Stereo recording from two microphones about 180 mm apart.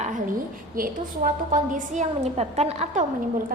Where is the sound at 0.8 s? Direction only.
50° right (ahead or behind).